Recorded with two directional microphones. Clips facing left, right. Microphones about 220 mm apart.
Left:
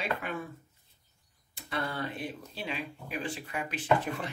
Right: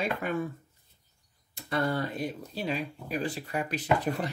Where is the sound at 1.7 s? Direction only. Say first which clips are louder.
Right 6 dB; 40° right (ahead or behind).